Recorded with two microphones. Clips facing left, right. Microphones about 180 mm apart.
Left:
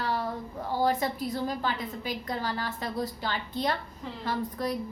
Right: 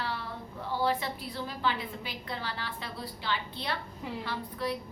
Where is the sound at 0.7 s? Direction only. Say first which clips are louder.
Left 3 dB; 45° left (ahead or behind).